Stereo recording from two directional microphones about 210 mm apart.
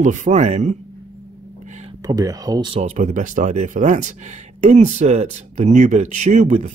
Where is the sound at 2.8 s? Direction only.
35° right (ahead or behind).